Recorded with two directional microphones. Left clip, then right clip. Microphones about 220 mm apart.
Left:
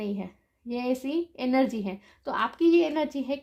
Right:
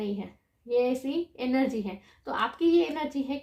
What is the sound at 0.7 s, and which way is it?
A woman's voice, 40° left (ahead or behind).